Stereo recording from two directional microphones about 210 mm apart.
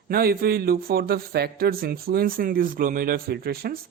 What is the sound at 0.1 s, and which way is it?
Speech, 45° right (ahead or behind).